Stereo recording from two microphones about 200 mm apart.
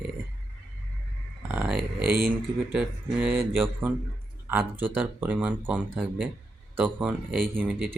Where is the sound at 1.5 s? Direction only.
5° right (ahead or behind).